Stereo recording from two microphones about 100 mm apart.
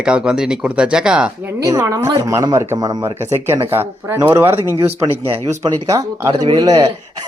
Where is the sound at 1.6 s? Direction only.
35° right (ahead or behind).